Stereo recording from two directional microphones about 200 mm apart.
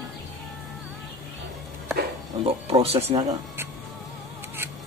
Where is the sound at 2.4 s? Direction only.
30° right (ahead or behind).